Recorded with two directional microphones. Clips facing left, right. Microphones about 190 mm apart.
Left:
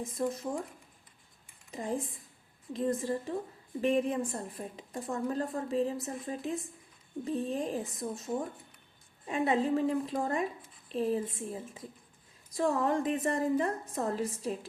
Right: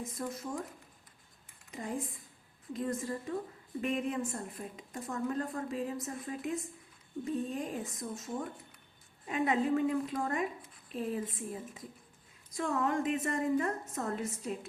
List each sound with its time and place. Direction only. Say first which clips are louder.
0.0 s a woman's voice: left 5 dB; 30° left (ahead or behind)
1.7 s a woman's voice: left 3 dB; 30° left (ahead or behind)